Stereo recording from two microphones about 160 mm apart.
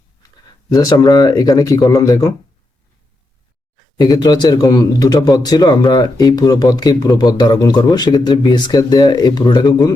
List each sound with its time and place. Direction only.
0.7 s speech: 25° left (ahead or behind)
3.9 s speech: 25° left (ahead or behind)